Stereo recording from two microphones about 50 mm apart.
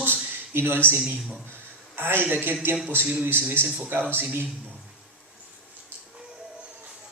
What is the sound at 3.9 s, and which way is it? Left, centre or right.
Speech, right.